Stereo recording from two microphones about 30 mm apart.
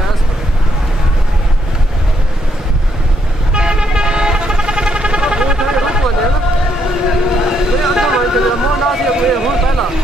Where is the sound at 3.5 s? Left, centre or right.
Right.